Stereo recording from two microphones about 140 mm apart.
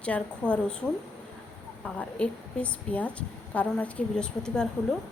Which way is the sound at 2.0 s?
10° left (ahead or behind).